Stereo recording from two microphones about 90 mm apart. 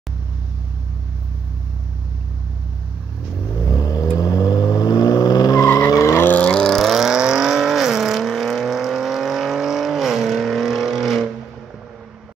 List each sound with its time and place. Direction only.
3.6 s vehicle: 40° left (ahead or behind)
6.0 s vehicle: 20° left (ahead or behind); by 11.2 s centre (ahead or behind)